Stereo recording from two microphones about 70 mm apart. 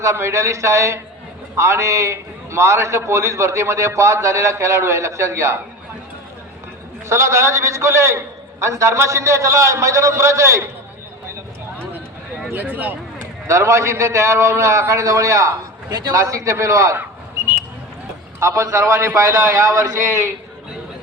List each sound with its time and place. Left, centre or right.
0.0 s a man's voice: right
7.1 s a man's voice: right
12.5 s speech: right
13.5 s a man's voice: right
18.3 s a man's voice: right